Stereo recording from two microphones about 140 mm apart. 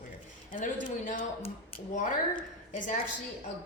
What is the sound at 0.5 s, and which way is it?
A woman's voice, 70° left (ahead or behind).